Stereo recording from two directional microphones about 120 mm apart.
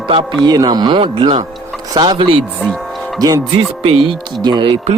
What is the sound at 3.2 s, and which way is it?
Speech, 30° right (ahead or behind).